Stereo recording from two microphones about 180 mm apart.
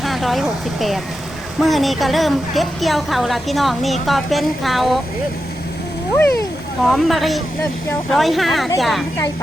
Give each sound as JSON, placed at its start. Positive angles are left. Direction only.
{"t": 0.0, "sound": "a woman's voice", "side_deg": 0}
{"t": 6.1, "sound": "speech", "side_deg": 10}
{"t": 6.8, "sound": "a woman's voice", "side_deg": 0}